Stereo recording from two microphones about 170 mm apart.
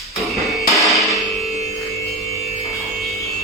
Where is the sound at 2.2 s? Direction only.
20° left (ahead or behind).